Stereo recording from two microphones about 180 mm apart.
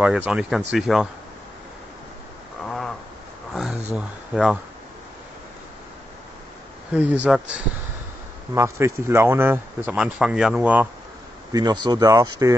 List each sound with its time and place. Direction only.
0.0 s speech: 5° right (ahead or behind)
2.6 s a sound: centre (ahead or behind)
3.9 s speech: 5° right (ahead or behind)
6.9 s speech: 10° right (ahead or behind)
8.5 s speech: 15° right (ahead or behind)
11.5 s speech: 25° right (ahead or behind)